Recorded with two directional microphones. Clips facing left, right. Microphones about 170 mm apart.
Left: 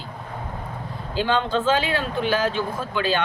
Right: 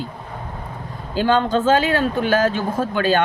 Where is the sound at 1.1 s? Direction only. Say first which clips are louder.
Right 5 dB; 45° right (ahead or behind).